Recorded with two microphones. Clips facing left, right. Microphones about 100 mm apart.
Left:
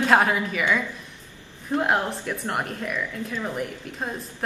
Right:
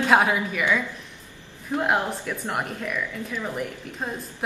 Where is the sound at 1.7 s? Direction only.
Centre (ahead or behind).